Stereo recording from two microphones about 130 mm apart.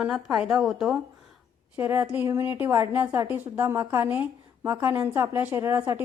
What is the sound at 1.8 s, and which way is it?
A woman's voice, 15° right (ahead or behind).